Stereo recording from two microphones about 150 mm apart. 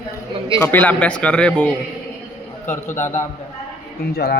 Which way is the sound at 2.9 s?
15° left (ahead or behind).